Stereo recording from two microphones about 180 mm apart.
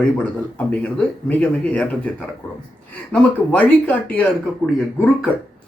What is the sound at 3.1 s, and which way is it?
Speech, 5° left (ahead or behind).